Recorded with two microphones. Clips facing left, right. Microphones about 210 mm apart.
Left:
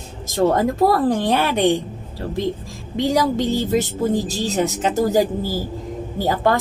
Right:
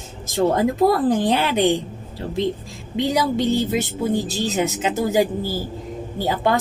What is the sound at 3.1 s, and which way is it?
A woman's voice, 40° left (ahead or behind).